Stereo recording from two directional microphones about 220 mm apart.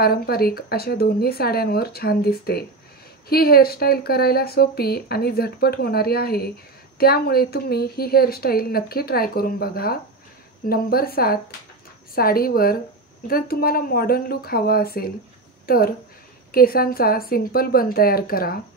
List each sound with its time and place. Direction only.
0.0 s a woman's voice: 45° left (ahead or behind)